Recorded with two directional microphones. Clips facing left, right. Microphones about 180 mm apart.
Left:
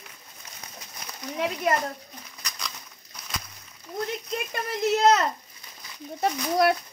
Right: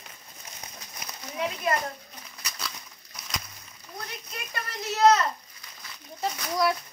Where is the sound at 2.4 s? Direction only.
5° right (ahead or behind).